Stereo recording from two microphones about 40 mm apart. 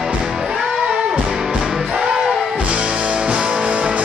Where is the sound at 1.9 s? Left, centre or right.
Centre.